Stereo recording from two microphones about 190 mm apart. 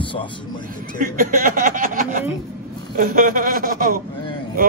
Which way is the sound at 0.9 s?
45° right (ahead or behind).